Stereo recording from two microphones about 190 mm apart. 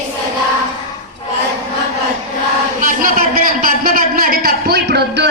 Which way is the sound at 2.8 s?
45° right (ahead or behind).